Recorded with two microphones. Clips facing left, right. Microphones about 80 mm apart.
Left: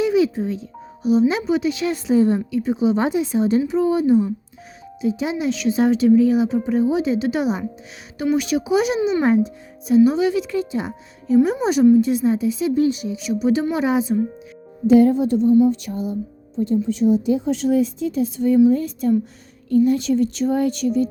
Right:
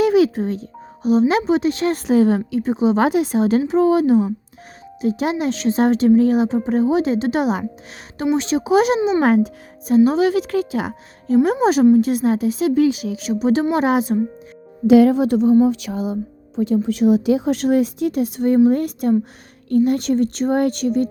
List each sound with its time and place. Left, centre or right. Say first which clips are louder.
0.0 s a woman's voice: right 3 dB; right
2.1 s speech: right 1 dB; right
5.0 s a woman's voice: right 2 dB; right
8.3 s speech: right 1 dB; right
8.6 s a woman's voice: right 7 dB; right
9.2 s speech: right 1 dB; right
9.9 s speech: right 1 dB; right
11.6 s speech: right 1 dB; right
12.7 s speech: right 2 dB; right
13.1 s a woman's voice: right 1 dB; right
13.7 s speech: right 2 dB; right
14.8 s speech: right 2 dB; right
15.6 s a woman's voice: right 1 dB; right